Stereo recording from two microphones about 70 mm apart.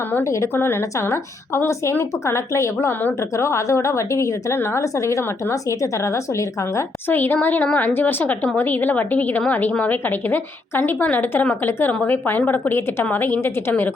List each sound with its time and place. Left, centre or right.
0.5 s a woman's voice: left
7.1 s a woman's voice: left